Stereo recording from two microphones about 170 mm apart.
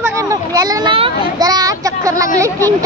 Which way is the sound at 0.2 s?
20° right (ahead or behind).